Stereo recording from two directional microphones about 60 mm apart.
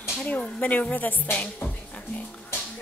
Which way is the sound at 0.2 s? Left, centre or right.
Left.